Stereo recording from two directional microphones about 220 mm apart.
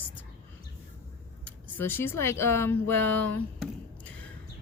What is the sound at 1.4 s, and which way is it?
Speech, 10° left (ahead or behind).